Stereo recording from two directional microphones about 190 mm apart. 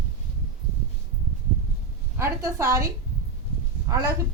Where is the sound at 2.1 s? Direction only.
15° right (ahead or behind).